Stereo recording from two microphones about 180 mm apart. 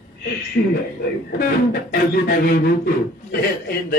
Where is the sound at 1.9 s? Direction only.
60° left (ahead or behind).